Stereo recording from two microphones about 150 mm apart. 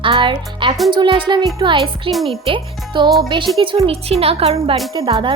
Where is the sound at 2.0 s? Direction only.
Centre (ahead or behind).